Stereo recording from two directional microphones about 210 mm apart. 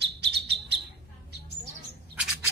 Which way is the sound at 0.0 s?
50° right (ahead or behind).